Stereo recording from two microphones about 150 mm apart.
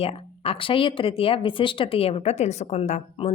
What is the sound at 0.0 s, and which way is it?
Speech, 40° left (ahead or behind).